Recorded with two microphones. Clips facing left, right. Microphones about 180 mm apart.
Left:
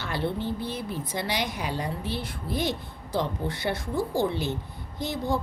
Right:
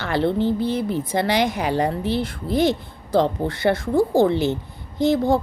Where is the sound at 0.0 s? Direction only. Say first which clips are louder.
Right 9 dB; 90° right.